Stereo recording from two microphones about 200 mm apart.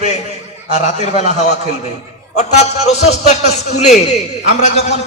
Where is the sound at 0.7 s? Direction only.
35° left (ahead or behind).